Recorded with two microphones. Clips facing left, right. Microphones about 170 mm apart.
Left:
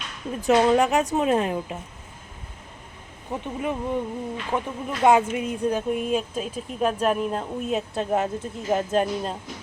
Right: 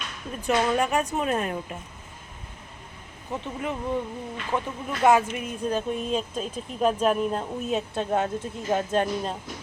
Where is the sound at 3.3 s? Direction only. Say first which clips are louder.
Left 3 dB; 15° left (ahead or behind).